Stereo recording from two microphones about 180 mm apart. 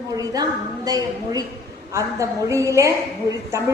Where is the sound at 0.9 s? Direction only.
20° right (ahead or behind).